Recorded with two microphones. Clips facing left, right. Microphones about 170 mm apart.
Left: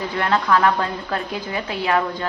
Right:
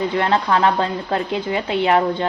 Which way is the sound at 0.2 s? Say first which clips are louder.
Even; 30° right (ahead or behind).